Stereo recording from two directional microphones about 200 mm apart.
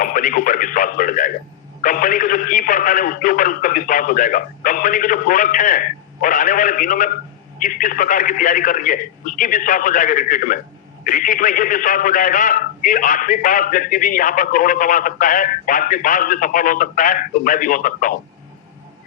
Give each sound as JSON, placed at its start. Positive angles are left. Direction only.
{"t": 0.0, "sound": "a man's voice", "side_deg": 40}